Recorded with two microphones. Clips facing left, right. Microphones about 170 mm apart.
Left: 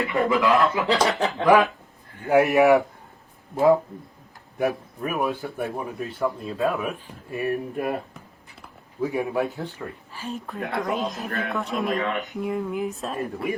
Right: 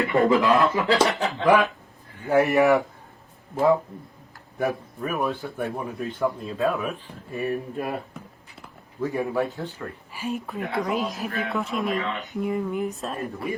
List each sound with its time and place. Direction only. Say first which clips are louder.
0.1 s speech: right 5 dB; 35° right (ahead or behind)
0.4 s speech: even; 20° right (ahead or behind)
0.8 s speech: even; centre (ahead or behind)
2.2 s a man's voice: left 2 dB; 15° left (ahead or behind)
3.5 s speech: left 2 dB; centre (ahead or behind)
4.5 s speech: left 1 dB; 10° left (ahead or behind)
9.0 s a man's voice: left 1 dB; 15° left (ahead or behind)
10.1 s speech: right 6 dB; 10° right (ahead or behind)